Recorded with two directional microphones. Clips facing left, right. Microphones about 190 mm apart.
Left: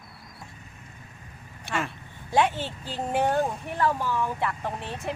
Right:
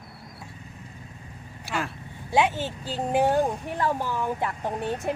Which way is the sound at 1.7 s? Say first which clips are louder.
Even; centre (ahead or behind).